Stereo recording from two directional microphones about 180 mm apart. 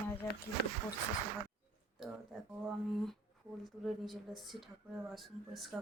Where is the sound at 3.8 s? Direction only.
Centre (ahead or behind).